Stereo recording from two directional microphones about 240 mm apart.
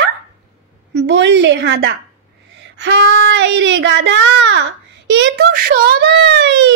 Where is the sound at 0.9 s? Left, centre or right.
Right.